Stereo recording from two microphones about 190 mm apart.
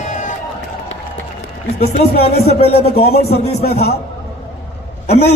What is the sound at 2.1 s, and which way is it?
Speech, 55° left (ahead or behind).